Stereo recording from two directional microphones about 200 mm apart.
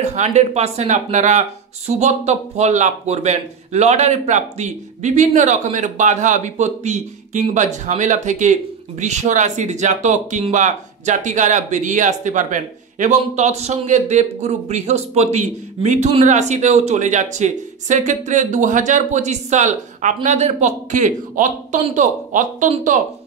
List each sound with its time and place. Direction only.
0.0 s speech: 35° right (ahead or behind)